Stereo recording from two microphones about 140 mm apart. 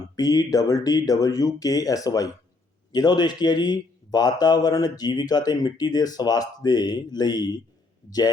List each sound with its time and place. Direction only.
0.2 s speech: 25° left (ahead or behind)